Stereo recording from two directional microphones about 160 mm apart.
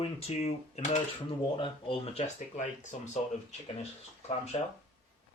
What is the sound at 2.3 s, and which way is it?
Speech, 50° left (ahead or behind).